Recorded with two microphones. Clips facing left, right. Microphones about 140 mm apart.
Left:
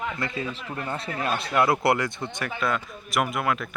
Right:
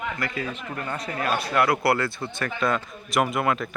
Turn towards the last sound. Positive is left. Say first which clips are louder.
# right 2 dB
turn(degrees=0)  # may be behind; listen again after turning